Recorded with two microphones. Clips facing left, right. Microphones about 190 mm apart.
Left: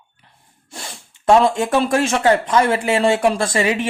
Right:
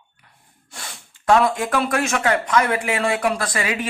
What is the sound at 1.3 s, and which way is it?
Speech, 25° left (ahead or behind).